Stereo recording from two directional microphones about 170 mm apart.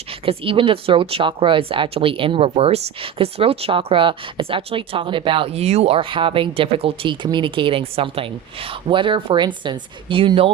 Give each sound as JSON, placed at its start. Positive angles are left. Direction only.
{"t": 0.3, "sound": "speech", "side_deg": -30}